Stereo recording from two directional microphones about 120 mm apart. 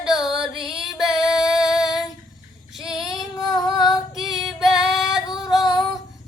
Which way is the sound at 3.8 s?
Centre (ahead or behind).